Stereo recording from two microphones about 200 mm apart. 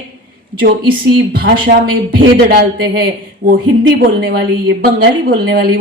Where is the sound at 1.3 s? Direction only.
50° right (ahead or behind).